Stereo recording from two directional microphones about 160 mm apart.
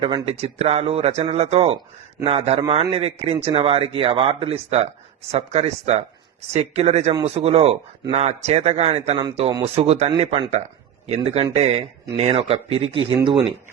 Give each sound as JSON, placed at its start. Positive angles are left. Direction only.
{"t": 0.0, "sound": "a man's voice", "side_deg": -30}
{"t": 0.3, "sound": "a man's voice", "side_deg": -40}
{"t": 10.1, "sound": "a man's voice", "side_deg": -30}
{"t": 11.0, "sound": "a man's voice", "side_deg": -40}